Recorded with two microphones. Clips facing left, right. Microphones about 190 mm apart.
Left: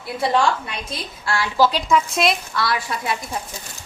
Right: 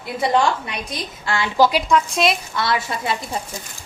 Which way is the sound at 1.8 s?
Centre (ahead or behind).